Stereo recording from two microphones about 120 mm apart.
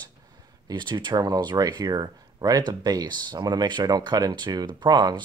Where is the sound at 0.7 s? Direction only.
40° right (ahead or behind).